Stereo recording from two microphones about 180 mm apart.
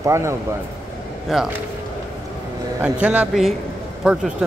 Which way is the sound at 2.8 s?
5° right (ahead or behind).